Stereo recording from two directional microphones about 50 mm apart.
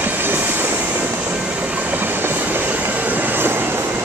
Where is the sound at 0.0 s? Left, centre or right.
Right.